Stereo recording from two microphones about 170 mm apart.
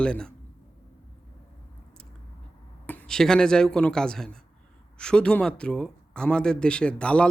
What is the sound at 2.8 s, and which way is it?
Speech, 5° left (ahead or behind).